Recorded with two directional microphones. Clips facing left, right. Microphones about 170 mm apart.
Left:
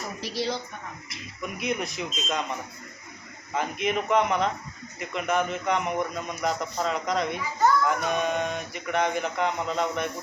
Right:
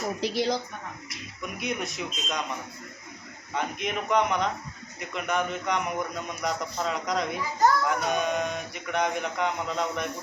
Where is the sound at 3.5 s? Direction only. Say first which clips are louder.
Left 3 dB; centre (ahead or behind).